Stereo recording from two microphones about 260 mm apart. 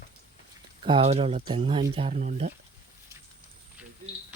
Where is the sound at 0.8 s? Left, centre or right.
Right.